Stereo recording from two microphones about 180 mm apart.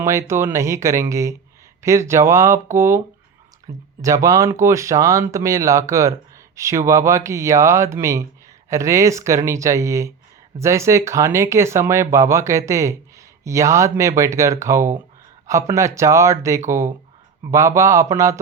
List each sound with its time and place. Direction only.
0.0 s speech: 15° right (ahead or behind)